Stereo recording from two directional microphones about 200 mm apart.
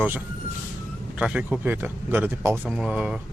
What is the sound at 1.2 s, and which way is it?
Speech, 5° right (ahead or behind).